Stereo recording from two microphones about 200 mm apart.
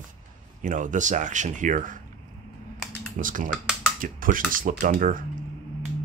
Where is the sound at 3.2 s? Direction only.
40° right (ahead or behind).